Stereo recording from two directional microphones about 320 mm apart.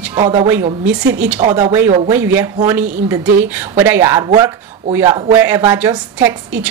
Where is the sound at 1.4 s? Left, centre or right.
Right.